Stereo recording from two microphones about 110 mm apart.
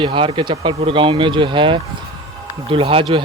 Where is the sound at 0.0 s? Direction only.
45° right (ahead or behind).